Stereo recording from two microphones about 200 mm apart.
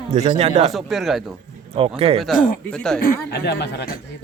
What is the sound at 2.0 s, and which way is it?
Speech, 25° right (ahead or behind).